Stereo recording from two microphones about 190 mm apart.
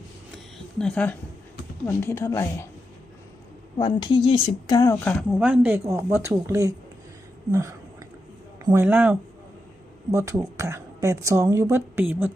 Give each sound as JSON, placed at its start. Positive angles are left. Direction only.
{"t": 0.8, "sound": "speech", "side_deg": 5}
{"t": 3.8, "sound": "speech", "side_deg": 25}
{"t": 5.4, "sound": "a woman's voice", "side_deg": -10}
{"t": 7.5, "sound": "whispering", "side_deg": -15}
{"t": 8.6, "sound": "a woman's voice", "side_deg": -15}